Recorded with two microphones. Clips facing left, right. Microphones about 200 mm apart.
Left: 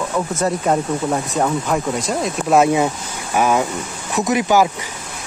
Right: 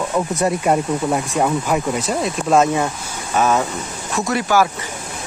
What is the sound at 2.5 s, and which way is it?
Speech, 10° left (ahead or behind).